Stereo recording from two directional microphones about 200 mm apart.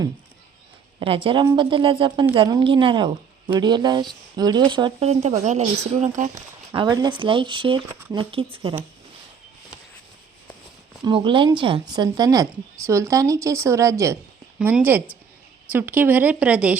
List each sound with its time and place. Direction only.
0.9 s a woman's voice: 25° right (ahead or behind)
6.7 s a woman's voice: 20° right (ahead or behind)
11.0 s a woman's voice: 25° right (ahead or behind); by 16.7 s 5° right (ahead or behind)